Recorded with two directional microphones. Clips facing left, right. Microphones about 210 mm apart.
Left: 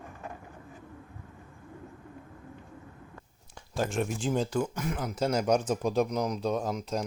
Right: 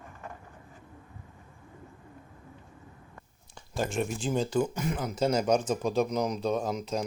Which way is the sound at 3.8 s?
Centre (ahead or behind).